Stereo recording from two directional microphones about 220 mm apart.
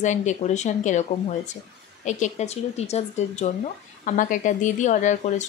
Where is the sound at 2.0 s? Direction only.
35° left (ahead or behind).